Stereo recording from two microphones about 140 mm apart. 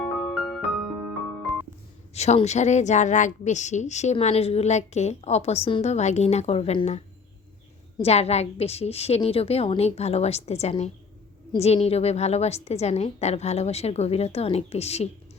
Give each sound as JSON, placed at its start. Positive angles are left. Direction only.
{"t": 0.0, "sound": "music", "side_deg": 0}
{"t": 2.1, "sound": "a woman's voice", "side_deg": 50}
{"t": 8.0, "sound": "a woman's voice", "side_deg": 50}